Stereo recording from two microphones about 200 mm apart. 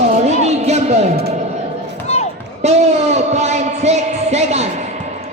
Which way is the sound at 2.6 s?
35° right (ahead or behind).